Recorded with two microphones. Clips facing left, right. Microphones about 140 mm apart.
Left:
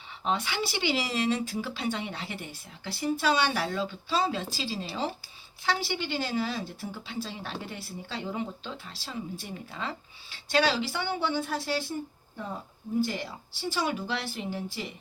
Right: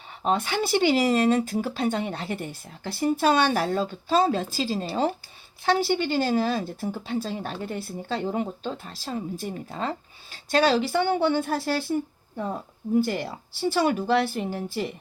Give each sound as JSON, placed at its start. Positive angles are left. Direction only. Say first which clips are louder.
{"t": 0.3, "sound": "speech", "louder": "right 6 dB", "side_deg": -45}
{"t": 13.1, "sound": "speech", "louder": "right 6 dB", "side_deg": -55}